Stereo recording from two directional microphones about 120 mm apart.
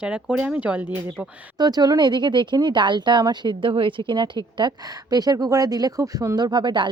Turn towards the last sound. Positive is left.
turn(degrees=-40)  # may be behind; listen again after turning